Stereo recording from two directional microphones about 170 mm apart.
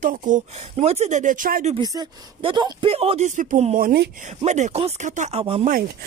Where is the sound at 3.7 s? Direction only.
65° right (ahead or behind).